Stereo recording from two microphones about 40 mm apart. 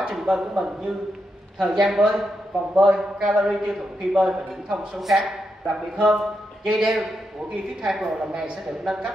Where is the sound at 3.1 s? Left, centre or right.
Centre.